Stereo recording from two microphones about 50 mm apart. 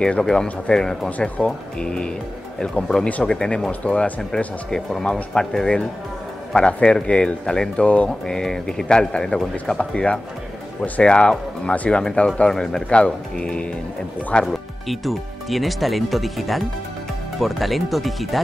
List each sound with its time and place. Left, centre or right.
0.0 s speech: centre
7.8 s speech: left
8.3 s speech: centre
9.8 s speech: left
14.4 s speech: centre